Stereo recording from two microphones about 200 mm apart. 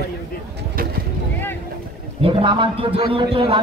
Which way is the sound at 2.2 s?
25° right (ahead or behind).